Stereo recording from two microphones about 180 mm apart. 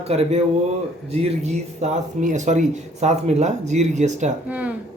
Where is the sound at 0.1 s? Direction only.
35° right (ahead or behind).